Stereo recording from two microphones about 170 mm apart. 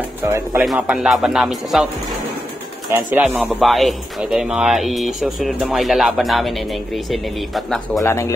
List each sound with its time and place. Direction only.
0.3 s speech: 15° right (ahead or behind)
0.7 s speech: 5° right (ahead or behind)
2.9 s speech: 10° right (ahead or behind)
8.0 s speech: 15° left (ahead or behind)